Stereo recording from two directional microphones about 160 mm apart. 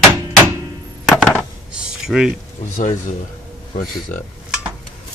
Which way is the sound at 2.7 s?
45° left (ahead or behind).